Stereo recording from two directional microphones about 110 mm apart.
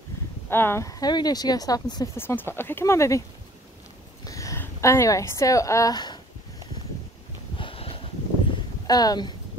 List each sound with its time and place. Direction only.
0.5 s speech: 20° left (ahead or behind)
2.1 s speech: 20° left (ahead or behind)
4.2 s a sound: 30° left (ahead or behind)
4.6 s speech: 25° left (ahead or behind)
7.5 s a sound: 55° left (ahead or behind)
8.8 s speech: 35° left (ahead or behind)